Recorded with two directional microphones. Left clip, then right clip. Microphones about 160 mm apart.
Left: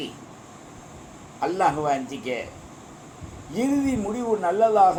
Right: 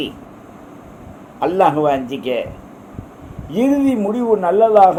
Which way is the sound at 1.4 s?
60° right (ahead or behind).